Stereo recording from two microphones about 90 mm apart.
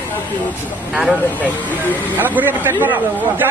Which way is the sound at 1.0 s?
15° left (ahead or behind).